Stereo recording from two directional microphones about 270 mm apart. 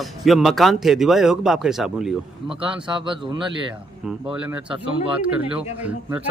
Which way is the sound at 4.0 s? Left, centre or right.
Centre.